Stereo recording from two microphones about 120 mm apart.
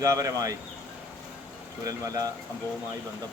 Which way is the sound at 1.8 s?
30° right (ahead or behind).